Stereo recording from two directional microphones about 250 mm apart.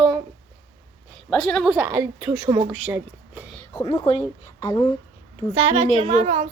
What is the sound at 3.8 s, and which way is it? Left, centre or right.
A woman's voice, centre.